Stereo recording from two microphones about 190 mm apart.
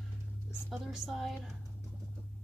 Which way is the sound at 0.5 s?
Centre (ahead or behind).